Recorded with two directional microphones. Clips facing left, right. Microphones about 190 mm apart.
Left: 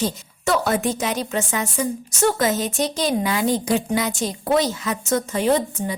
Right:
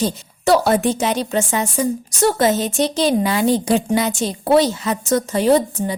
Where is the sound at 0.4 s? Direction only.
35° right (ahead or behind).